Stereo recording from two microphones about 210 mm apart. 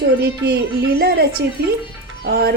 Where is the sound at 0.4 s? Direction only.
50° right (ahead or behind).